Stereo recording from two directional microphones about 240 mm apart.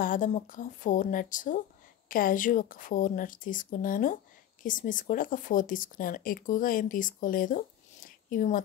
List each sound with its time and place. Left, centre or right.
0.0 s speech: left